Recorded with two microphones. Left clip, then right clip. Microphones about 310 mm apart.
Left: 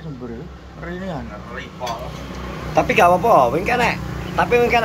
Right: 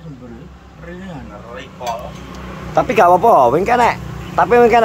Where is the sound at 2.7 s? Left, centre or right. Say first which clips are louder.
Right 3 dB; centre.